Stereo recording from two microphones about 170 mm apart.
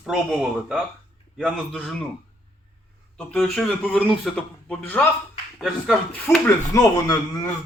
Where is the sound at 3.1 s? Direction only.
5° left (ahead or behind).